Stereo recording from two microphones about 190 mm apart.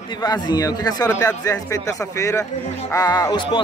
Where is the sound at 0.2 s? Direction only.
20° left (ahead or behind).